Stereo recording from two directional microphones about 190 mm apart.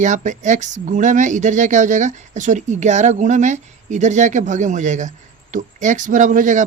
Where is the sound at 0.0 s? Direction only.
40° right (ahead or behind).